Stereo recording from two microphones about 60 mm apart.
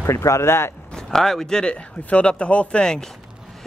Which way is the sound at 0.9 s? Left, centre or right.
Centre.